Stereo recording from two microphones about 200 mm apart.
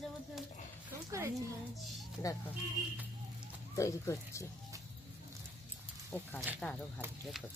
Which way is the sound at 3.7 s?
15° left (ahead or behind).